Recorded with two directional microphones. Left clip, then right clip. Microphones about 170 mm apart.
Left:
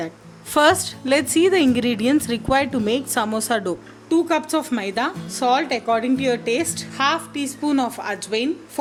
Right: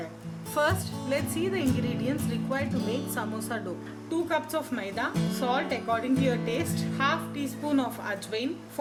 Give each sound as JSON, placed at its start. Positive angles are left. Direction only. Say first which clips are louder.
{"t": 0.5, "sound": "a woman's voice", "louder": "left 11 dB", "side_deg": 60}